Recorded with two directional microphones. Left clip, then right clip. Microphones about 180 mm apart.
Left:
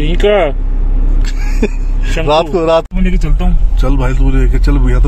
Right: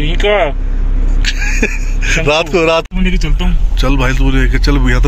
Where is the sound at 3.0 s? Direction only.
65° left (ahead or behind).